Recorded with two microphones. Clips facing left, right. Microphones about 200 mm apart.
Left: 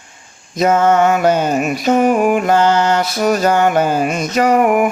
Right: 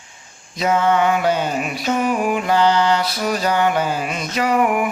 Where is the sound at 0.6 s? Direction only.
45° left (ahead or behind).